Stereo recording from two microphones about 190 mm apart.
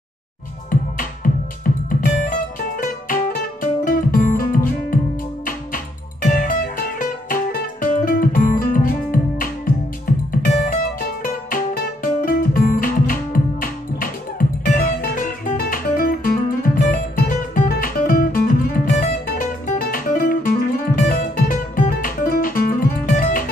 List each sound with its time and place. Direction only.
0.7 s music: 45° left (ahead or behind)
3.8 s music: 45° left (ahead or behind)